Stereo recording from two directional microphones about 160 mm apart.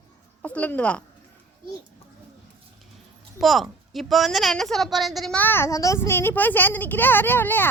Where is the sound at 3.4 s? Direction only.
Centre (ahead or behind).